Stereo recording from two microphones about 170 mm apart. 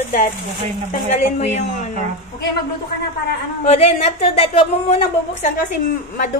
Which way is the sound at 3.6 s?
40° left (ahead or behind).